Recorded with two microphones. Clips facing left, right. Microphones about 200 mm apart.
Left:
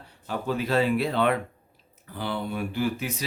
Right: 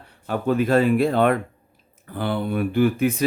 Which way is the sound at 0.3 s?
55° right (ahead or behind).